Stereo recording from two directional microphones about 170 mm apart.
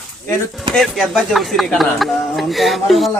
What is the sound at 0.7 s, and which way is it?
Speech, centre (ahead or behind).